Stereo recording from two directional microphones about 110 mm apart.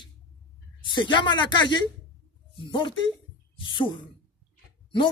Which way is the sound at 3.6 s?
45° left (ahead or behind).